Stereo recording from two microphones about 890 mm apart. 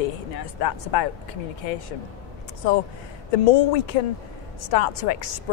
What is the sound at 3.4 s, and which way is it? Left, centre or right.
Speech, left.